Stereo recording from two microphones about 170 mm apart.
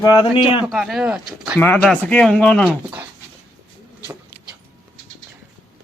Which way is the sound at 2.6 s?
5° right (ahead or behind).